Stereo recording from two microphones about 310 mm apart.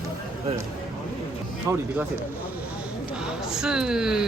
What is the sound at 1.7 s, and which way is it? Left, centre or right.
Speech, centre.